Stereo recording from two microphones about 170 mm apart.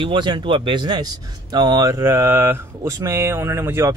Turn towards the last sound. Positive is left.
turn(degrees=-15)  # may be behind; listen again after turning